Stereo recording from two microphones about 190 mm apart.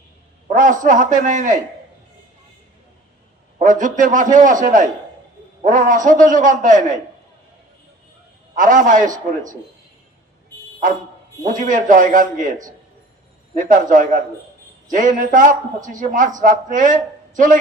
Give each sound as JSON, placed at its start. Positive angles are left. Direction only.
{"t": 0.4, "sound": "a man's voice", "side_deg": -45}
{"t": 3.6, "sound": "a man's voice", "side_deg": -40}
{"t": 8.5, "sound": "a man's voice", "side_deg": -45}
{"t": 11.5, "sound": "a man's voice", "side_deg": -45}
{"t": 13.5, "sound": "a man's voice", "side_deg": -40}